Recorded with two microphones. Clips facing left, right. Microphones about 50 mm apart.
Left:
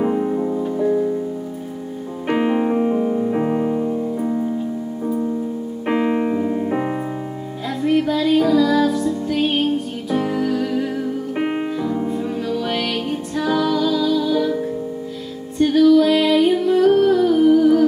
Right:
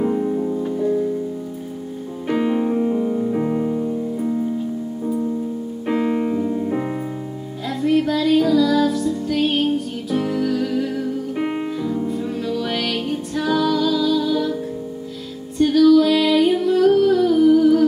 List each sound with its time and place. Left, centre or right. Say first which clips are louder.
0.0 s music: left 1 dB; left
2.2 s music: left 1 dB; left
5.9 s keyboard: left 1 dB; left
7.6 s music: even; centre
15.6 s music: even; left